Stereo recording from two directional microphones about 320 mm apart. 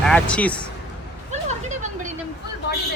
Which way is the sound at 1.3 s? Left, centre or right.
Right.